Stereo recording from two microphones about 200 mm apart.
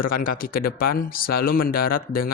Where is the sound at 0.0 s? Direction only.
45° left (ahead or behind).